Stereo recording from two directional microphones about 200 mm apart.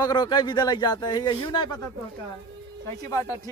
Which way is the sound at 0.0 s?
20° left (ahead or behind).